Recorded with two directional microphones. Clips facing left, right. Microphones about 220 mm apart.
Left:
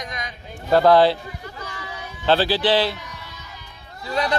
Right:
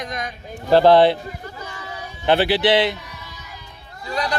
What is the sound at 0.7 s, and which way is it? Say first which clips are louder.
Speech: right 2 dB; 25° right (ahead or behind).